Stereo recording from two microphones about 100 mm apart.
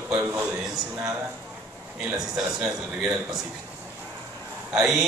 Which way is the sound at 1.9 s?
5° right (ahead or behind).